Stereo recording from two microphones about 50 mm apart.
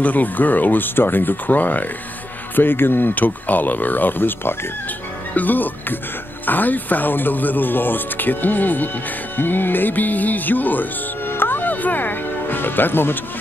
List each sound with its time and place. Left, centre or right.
0.0 s speech: left
2.5 s speech: left